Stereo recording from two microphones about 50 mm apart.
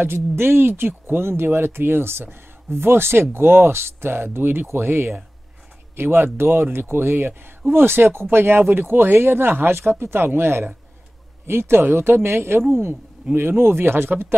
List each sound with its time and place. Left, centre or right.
0.0 s speech: right